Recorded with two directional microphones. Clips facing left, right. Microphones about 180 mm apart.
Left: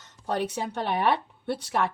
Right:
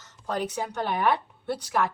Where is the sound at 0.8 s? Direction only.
25° left (ahead or behind).